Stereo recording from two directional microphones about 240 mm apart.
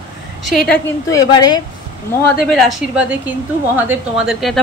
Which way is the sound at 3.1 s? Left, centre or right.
Centre.